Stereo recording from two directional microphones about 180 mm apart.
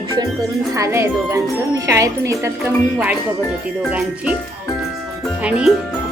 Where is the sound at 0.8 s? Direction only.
15° right (ahead or behind).